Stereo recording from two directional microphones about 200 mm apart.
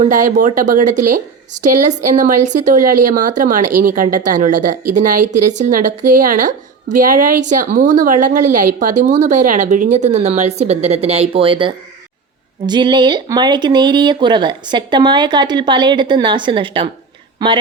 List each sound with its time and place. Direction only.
0.0 s speech: 40° right (ahead or behind)